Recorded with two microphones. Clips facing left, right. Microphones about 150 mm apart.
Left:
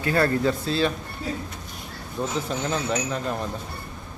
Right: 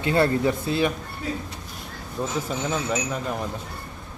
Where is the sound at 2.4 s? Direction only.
5° right (ahead or behind).